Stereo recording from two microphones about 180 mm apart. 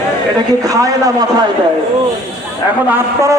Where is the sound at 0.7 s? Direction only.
20° right (ahead or behind).